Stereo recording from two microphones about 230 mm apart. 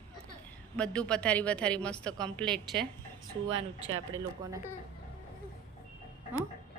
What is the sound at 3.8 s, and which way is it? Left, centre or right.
Speech, right.